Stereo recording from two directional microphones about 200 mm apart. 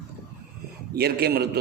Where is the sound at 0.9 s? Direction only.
55° right (ahead or behind).